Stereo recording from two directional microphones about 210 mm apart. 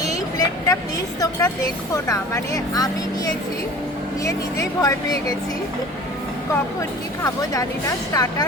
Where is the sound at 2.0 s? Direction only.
15° left (ahead or behind).